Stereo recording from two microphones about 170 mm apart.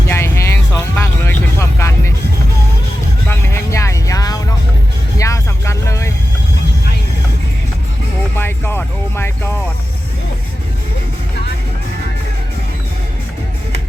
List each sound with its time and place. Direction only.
0.1 s vehicle: 15° left (ahead or behind)
3.2 s vehicle: 15° left (ahead or behind)
8.4 s music: 15° left (ahead or behind)